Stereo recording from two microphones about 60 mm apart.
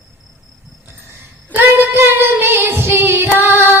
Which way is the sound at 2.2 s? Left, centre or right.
Right.